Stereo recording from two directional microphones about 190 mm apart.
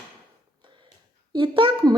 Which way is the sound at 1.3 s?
25° right (ahead or behind).